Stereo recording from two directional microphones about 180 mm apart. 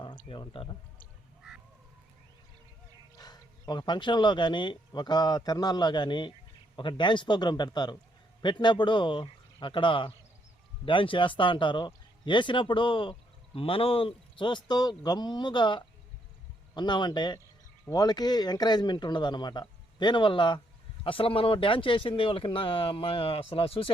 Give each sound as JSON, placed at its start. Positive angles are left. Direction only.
{"t": 0.3, "sound": "speech", "side_deg": 30}
{"t": 1.4, "sound": "a sound", "side_deg": -5}
{"t": 3.2, "sound": "a man's voice", "side_deg": 20}